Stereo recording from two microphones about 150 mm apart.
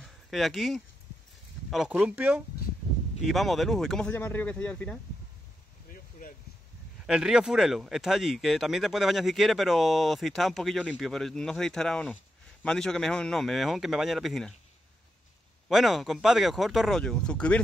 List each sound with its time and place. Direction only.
0.0 s speech: centre (ahead or behind)
5.9 s a sound: 70° left (ahead or behind)
7.1 s speech: 5° right (ahead or behind)
15.7 s speech: centre (ahead or behind)